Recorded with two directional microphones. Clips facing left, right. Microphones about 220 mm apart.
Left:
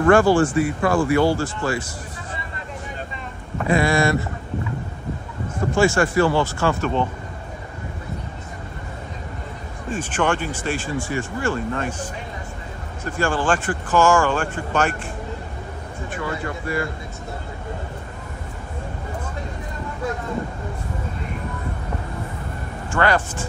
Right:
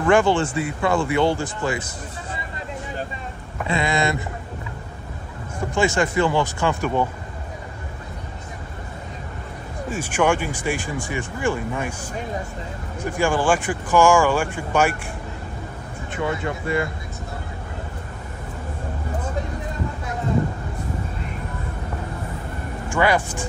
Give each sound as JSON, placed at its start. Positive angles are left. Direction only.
{"t": 0.1, "sound": "speech", "side_deg": -20}
{"t": 3.8, "sound": "speech", "side_deg": -20}
{"t": 5.7, "sound": "speech", "side_deg": -20}
{"t": 9.8, "sound": "speech", "side_deg": -10}
{"t": 16.1, "sound": "speech", "side_deg": -20}
{"t": 22.8, "sound": "speech", "side_deg": -10}